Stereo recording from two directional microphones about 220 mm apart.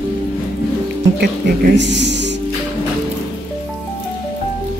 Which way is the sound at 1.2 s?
50° right (ahead or behind).